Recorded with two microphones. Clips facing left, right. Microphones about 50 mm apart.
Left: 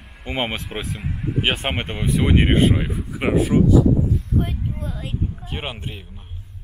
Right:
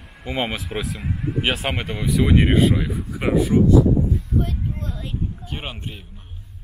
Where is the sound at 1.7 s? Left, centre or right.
Left.